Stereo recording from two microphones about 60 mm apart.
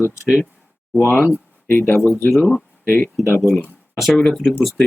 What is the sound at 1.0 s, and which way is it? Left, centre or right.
Speech, left.